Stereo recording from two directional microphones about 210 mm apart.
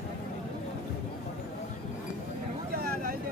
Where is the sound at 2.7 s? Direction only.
45° right (ahead or behind).